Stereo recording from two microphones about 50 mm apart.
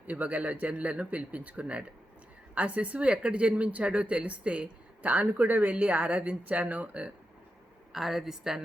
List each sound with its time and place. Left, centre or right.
0.1 s speech: right
7.9 s a woman's voice: centre